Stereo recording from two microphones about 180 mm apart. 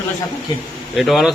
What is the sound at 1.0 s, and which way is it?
Speech, centre (ahead or behind).